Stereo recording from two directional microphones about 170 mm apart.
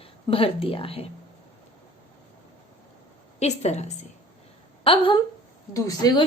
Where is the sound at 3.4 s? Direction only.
40° left (ahead or behind).